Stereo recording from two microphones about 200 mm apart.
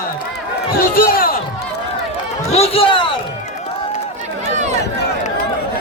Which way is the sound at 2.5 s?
30° left (ahead or behind).